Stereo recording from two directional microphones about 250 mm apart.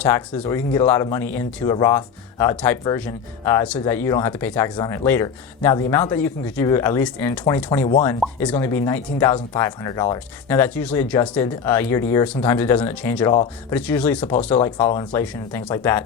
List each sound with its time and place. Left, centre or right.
0.0 s speech: centre
13.3 s speech: centre
13.7 s speech: centre